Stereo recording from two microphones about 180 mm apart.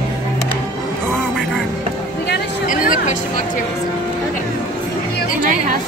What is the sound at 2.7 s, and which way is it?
Music, 45° left (ahead or behind).